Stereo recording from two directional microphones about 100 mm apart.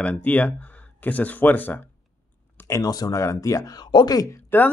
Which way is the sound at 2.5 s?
30° left (ahead or behind).